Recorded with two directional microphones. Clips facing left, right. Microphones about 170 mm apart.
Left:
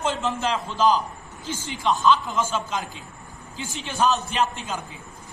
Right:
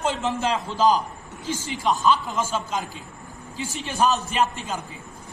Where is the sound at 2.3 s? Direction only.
10° right (ahead or behind).